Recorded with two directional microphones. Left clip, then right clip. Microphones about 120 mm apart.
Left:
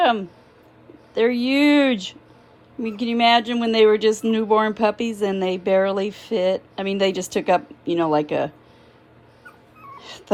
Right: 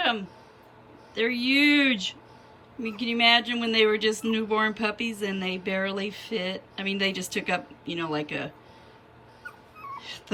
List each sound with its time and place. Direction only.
0.0 s speech: 20° left (ahead or behind)
10.0 s wail: 25° left (ahead or behind)